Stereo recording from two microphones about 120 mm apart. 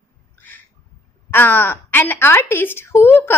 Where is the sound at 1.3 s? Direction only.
20° left (ahead or behind).